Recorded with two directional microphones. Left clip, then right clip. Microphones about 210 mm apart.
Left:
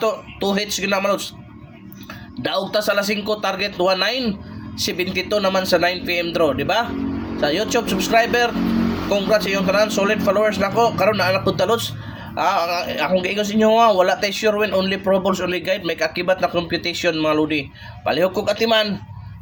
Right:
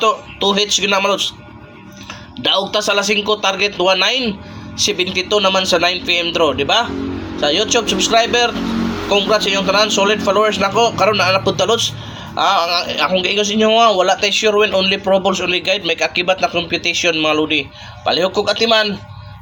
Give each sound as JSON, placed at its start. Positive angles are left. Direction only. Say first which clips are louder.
{"t": 0.0, "sound": "speech", "louder": "right 6 dB", "side_deg": 20}
{"t": 2.4, "sound": "speech", "louder": "right 5 dB", "side_deg": 15}